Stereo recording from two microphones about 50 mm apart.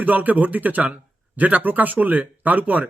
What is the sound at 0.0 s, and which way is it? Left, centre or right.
Speech, right.